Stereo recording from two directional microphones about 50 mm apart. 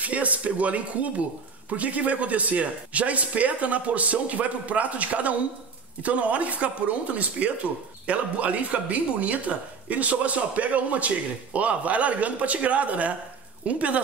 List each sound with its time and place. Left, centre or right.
0.0 s a woman's voice: right